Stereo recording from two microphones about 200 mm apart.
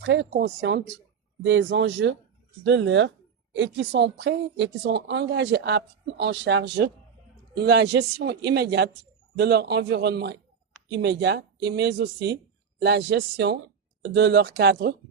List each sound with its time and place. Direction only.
0.0 s a woman's voice: 65° right (ahead or behind)